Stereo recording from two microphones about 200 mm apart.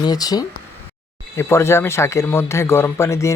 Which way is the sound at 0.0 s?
20° left (ahead or behind).